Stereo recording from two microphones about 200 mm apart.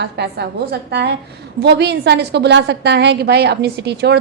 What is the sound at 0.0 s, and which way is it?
A woman's voice, 55° right (ahead or behind).